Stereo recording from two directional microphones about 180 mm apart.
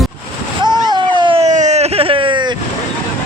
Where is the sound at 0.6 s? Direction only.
25° right (ahead or behind).